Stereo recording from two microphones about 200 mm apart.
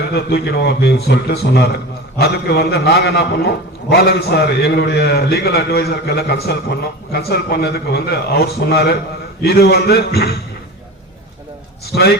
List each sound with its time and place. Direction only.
0.1 s a man's voice: 55° left (ahead or behind)
11.9 s a man's voice: 50° left (ahead or behind)